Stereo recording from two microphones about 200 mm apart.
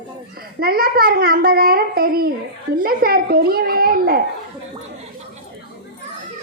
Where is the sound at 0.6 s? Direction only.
50° right (ahead or behind).